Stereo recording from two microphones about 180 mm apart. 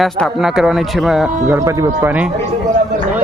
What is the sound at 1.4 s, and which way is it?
Speech, 15° right (ahead or behind).